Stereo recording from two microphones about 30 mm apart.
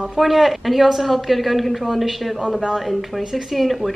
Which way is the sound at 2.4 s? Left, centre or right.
Right.